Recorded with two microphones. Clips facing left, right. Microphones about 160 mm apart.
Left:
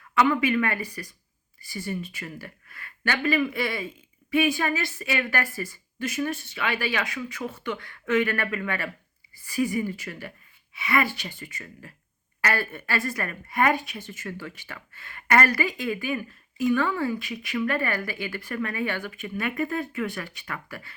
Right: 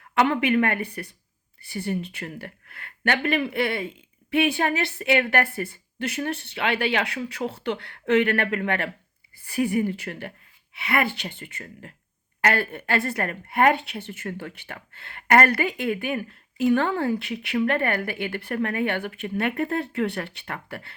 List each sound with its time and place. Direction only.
0.1 s a woman's voice: 60° right (ahead or behind)